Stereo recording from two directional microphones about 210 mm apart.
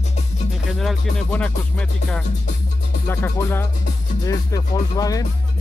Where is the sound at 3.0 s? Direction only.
10° left (ahead or behind).